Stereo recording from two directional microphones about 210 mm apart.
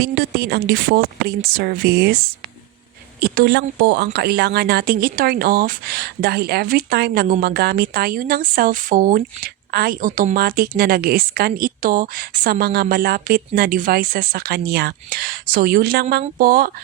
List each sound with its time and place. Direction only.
0.0 s speech: 50° right (ahead or behind)
3.2 s speech: 45° right (ahead or behind)